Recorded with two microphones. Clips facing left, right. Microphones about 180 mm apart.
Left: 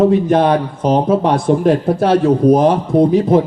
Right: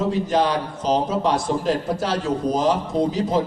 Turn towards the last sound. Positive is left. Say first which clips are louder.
# left 9 dB
turn(degrees=60)  # may be behind; listen again after turning